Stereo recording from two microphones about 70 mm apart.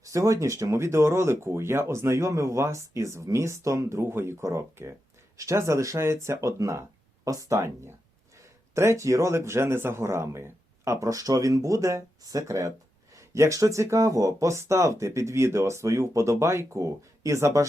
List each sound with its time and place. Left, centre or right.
0.0 s speech: right
8.7 s speech: right